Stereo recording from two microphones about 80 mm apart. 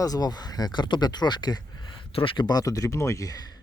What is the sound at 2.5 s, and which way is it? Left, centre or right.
Speech, left.